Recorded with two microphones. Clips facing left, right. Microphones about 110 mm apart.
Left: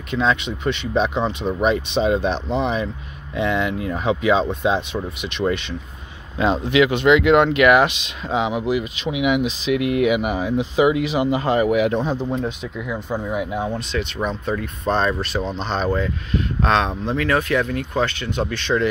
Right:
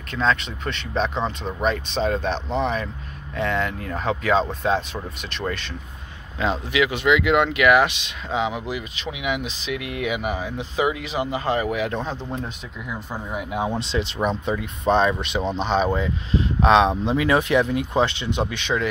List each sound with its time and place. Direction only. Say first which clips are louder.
0.1 s speech: left 2 dB; 5° left (ahead or behind)
6.3 s speech: left 5 dB; 20° left (ahead or behind); by 13.6 s centre (ahead or behind)
13.7 s speech: even; 30° right (ahead or behind)
14.5 s speech: right 1 dB; 15° right (ahead or behind)